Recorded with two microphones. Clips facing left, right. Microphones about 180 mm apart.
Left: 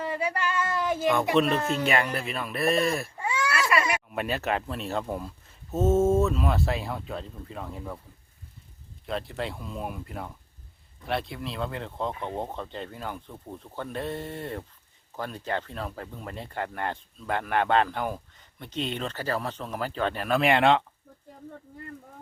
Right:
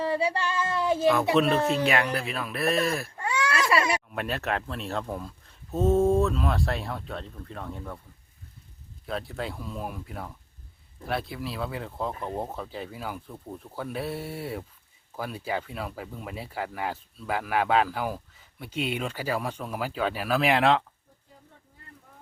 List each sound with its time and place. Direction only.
0.0 s female singing: 30° right (ahead or behind)
0.9 s speech: centre (ahead or behind)
9.0 s speech: centre (ahead or behind)